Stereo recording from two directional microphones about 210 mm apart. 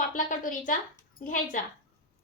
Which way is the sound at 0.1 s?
40° left (ahead or behind).